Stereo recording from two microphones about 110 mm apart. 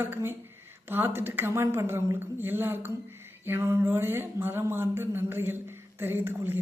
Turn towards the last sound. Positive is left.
turn(degrees=-20)  # may be behind; listen again after turning